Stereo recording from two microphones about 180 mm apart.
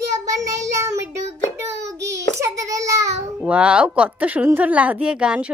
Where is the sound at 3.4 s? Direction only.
5° right (ahead or behind).